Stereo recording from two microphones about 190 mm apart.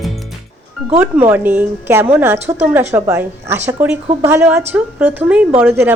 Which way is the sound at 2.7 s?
10° right (ahead or behind).